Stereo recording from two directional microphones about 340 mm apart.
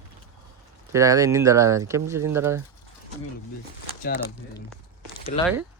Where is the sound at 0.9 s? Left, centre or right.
Centre.